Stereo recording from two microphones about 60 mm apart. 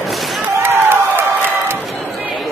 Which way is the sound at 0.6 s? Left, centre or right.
Right.